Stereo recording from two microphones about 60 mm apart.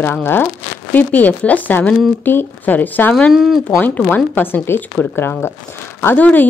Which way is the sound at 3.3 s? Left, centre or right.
Centre.